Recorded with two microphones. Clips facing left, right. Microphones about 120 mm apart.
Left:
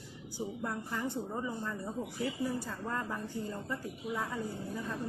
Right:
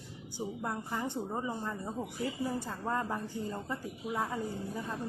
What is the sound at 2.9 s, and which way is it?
A woman's voice, 20° right (ahead or behind).